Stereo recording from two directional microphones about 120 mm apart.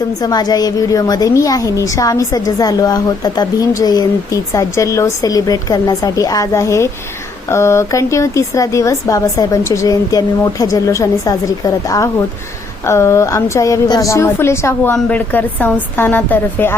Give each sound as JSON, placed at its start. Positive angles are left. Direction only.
{"t": 0.2, "sound": "a woman's voice", "side_deg": 35}